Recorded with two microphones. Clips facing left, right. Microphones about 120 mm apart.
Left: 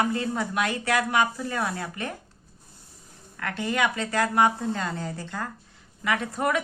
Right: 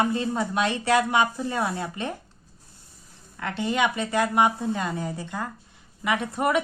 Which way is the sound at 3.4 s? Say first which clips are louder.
Right 2 dB; 20° right (ahead or behind).